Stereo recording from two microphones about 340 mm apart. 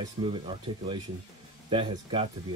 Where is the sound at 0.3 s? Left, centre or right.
Centre.